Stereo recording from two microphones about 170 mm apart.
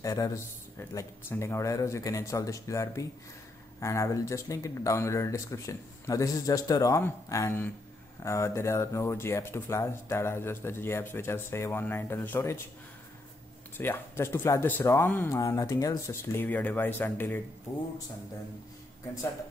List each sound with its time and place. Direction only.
0.0 s speech: 20° left (ahead or behind)
13.7 s speech: 15° left (ahead or behind)